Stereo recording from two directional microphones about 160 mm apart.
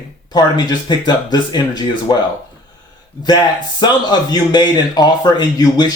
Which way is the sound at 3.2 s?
25° left (ahead or behind).